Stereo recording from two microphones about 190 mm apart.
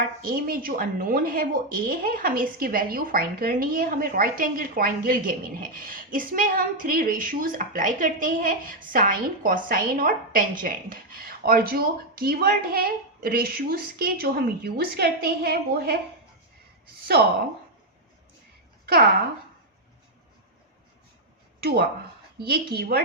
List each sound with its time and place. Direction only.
0.2 s a woman's voice: 50° right (ahead or behind)
17.2 s a woman's voice: 55° right (ahead or behind)
22.4 s a woman's voice: 55° right (ahead or behind)